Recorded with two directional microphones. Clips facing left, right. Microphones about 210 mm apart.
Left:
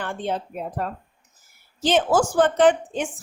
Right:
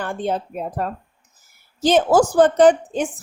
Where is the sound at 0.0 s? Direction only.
40° right (ahead or behind).